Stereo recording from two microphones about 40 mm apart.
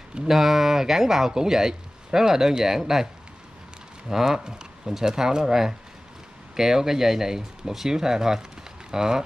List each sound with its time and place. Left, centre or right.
0.3 s speech: centre
4.1 s speech: centre